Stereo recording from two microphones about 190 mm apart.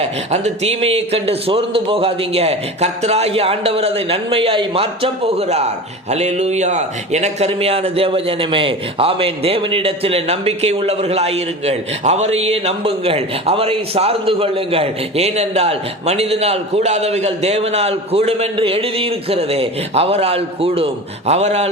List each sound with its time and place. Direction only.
0.0 s a man's voice: 35° right (ahead or behind)